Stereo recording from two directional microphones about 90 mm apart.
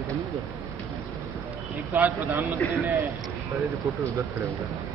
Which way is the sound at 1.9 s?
20° right (ahead or behind).